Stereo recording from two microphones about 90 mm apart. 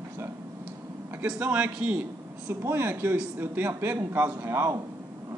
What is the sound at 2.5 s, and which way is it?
Speech, 25° right (ahead or behind).